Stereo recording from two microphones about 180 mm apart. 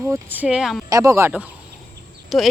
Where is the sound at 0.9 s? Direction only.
20° right (ahead or behind); by 2.5 s centre (ahead or behind).